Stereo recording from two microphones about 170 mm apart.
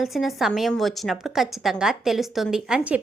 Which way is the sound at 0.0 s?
Centre (ahead or behind).